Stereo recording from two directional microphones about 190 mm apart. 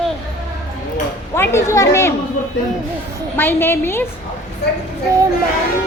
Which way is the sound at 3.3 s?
10° left (ahead or behind).